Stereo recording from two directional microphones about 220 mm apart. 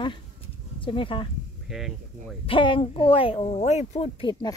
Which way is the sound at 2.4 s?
20° left (ahead or behind).